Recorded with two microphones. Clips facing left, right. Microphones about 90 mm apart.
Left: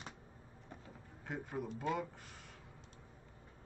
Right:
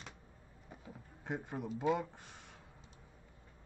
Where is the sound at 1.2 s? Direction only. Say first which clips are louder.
Right 2 dB; 20° right (ahead or behind).